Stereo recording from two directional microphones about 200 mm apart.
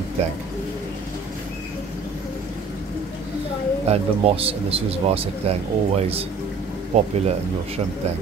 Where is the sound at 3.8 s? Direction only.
30° right (ahead or behind).